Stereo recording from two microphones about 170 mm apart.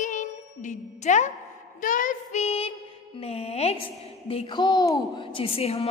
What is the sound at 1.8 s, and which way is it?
Child singing, 50° left (ahead or behind).